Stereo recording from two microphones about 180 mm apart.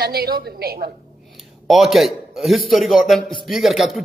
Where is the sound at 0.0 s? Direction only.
60° right (ahead or behind).